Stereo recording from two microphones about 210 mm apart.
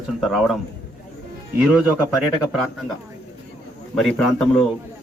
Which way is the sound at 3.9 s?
Centre (ahead or behind).